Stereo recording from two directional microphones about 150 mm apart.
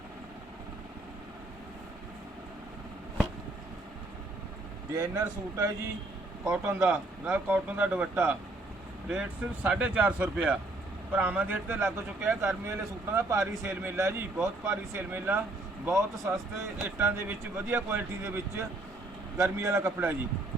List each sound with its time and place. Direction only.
4.9 s a man's voice: 25° right (ahead or behind)
9.6 s a man's voice: 5° right (ahead or behind)